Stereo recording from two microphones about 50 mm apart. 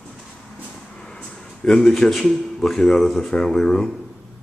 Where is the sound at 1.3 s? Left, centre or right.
Centre.